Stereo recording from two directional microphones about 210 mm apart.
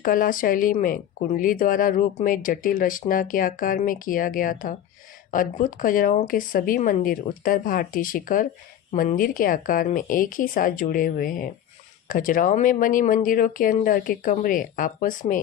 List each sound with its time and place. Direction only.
0.0 s speech: 40° left (ahead or behind)